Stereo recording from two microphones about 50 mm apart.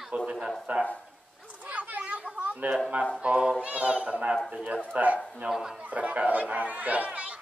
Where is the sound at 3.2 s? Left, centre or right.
Right.